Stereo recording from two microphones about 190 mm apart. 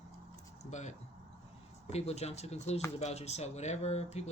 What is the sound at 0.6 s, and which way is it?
Speech, 40° left (ahead or behind).